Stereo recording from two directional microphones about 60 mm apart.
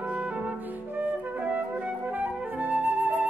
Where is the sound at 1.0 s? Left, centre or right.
Right.